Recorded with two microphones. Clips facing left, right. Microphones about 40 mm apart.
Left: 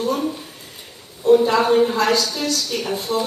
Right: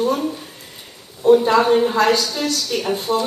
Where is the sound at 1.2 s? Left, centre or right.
Centre.